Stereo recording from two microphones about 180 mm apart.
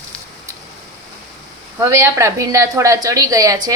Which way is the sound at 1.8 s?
15° right (ahead or behind).